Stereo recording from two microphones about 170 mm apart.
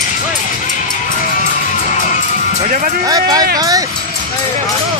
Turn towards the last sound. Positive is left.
turn(degrees=-20)  # may be behind; listen again after turning